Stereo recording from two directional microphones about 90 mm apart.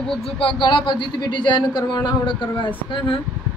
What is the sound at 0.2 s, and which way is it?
A man's voice, 85° left.